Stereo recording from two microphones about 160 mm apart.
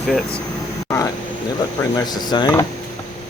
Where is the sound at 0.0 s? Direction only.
Centre (ahead or behind).